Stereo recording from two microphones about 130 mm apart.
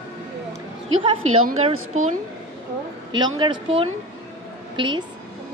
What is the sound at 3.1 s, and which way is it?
A woman's voice, 35° right (ahead or behind).